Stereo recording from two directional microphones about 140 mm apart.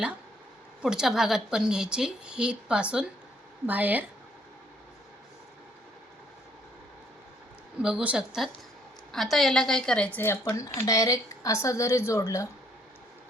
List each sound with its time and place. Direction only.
0.8 s a woman's voice: 5° right (ahead or behind)
7.8 s a woman's voice: 5° right (ahead or behind); by 12.5 s 20° left (ahead or behind)